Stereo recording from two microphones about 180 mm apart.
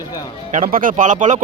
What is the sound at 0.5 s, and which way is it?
Speech, 50° right (ahead or behind).